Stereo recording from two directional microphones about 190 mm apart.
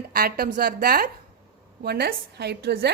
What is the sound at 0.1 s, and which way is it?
A woman's voice, 50° right (ahead or behind).